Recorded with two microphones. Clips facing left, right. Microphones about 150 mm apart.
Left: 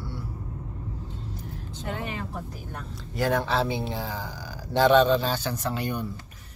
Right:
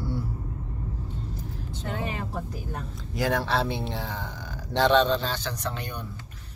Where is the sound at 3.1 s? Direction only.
Centre (ahead or behind).